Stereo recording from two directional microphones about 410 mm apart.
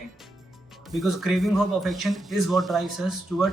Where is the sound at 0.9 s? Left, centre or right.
Centre.